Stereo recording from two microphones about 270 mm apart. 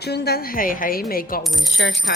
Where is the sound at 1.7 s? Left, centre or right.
Left.